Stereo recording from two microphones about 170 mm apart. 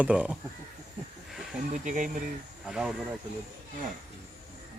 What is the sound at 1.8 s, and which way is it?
Speech, 45° right (ahead or behind).